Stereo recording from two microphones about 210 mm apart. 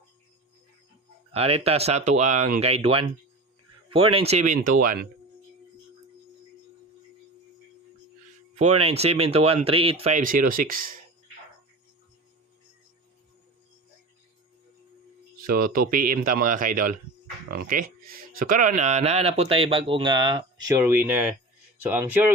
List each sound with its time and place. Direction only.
1.4 s speech: 30° right (ahead or behind)
8.8 s speech: 30° right (ahead or behind)
15.4 s speech: 45° right (ahead or behind); by 22.3 s 10° right (ahead or behind)